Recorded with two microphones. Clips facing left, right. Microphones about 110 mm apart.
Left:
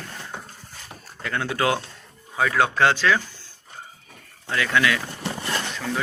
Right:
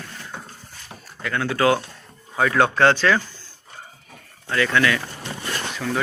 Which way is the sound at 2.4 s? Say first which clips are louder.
Right 2 dB; centre (ahead or behind).